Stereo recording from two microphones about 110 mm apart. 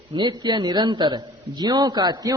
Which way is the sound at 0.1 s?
45° right (ahead or behind).